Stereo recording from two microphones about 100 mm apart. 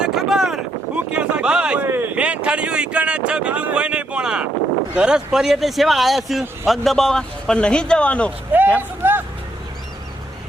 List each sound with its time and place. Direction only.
0.0 s wind noise: 5° right (ahead or behind)
1.1 s a sound: 10° right (ahead or behind)
2.1 s a man's voice: 10° right (ahead or behind); by 8.3 s 10° left (ahead or behind)
8.5 s speech: 15° right (ahead or behind)
9.0 s vehicle: 25° right (ahead or behind)